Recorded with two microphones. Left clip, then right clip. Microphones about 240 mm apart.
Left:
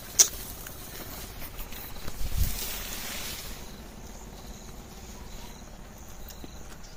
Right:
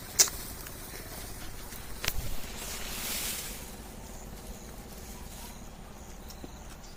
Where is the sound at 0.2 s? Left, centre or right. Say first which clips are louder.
Left 3 dB; centre.